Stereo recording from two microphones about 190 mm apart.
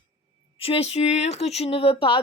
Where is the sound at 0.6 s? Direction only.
30° left (ahead or behind).